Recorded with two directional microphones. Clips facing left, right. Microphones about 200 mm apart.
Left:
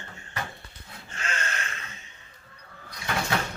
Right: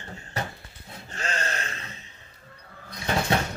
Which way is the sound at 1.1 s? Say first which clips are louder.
Right 3 dB; 35° right (ahead or behind).